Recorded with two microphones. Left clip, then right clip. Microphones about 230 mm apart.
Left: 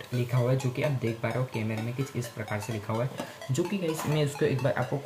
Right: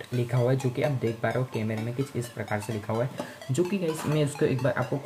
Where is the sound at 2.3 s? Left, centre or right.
Centre.